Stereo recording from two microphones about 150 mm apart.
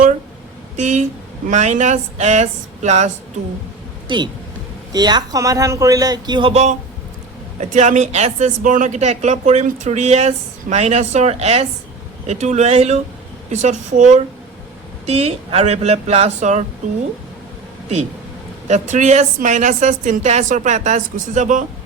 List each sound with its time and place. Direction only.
0.8 s speech: 50° right (ahead or behind)
4.1 s a man's voice: 30° right (ahead or behind)
6.5 s speech: 50° right (ahead or behind)
15.0 s speech: 45° right (ahead or behind)
18.7 s a woman's voice: 50° right (ahead or behind)